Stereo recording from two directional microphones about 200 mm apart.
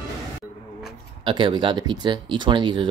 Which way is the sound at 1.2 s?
25° right (ahead or behind).